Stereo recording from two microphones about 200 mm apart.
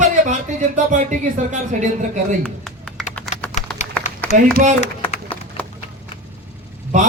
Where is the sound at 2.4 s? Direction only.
Centre (ahead or behind).